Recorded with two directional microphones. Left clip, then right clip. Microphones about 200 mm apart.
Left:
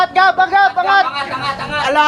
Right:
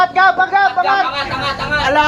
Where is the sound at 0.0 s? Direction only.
50° left (ahead or behind).